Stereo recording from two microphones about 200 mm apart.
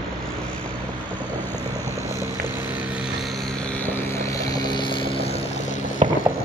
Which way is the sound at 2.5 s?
5° right (ahead or behind).